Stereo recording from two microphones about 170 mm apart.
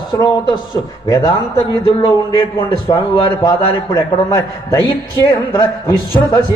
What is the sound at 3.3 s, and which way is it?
A man's voice, 15° left (ahead or behind).